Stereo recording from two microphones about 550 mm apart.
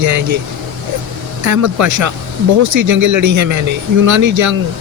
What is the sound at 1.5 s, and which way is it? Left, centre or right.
Speech, right.